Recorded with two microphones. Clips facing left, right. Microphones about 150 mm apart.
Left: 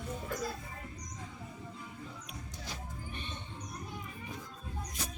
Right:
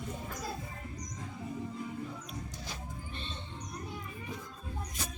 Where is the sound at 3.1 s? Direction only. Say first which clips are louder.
Left 1 dB; 15° left (ahead or behind).